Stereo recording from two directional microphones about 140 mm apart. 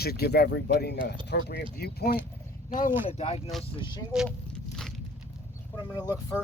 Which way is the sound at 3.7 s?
30° left (ahead or behind).